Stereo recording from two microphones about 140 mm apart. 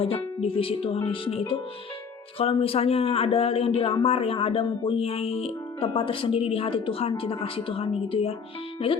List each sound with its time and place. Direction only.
0.0 s speech: 40° left (ahead or behind)